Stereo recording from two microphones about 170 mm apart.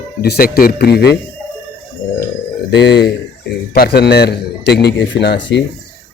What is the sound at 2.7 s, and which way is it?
Speech, 90° left.